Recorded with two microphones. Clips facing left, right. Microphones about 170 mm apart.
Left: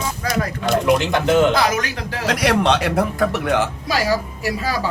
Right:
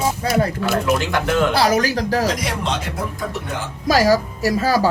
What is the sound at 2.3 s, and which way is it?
A man's voice, 70° left (ahead or behind).